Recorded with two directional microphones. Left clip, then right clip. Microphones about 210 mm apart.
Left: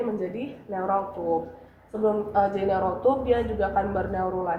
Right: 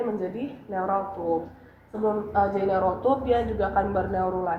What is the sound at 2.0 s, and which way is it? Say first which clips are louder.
A man's voice: left 1 dB; 10° right (ahead or behind).